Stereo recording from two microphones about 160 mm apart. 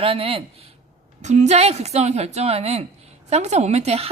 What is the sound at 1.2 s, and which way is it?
A woman's voice, 45° right (ahead or behind).